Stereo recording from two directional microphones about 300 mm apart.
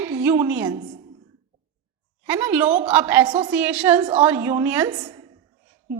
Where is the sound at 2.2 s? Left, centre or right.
Centre.